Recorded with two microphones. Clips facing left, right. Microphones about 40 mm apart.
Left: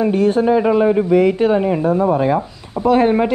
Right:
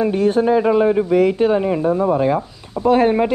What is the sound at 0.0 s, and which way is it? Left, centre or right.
A man's voice, centre.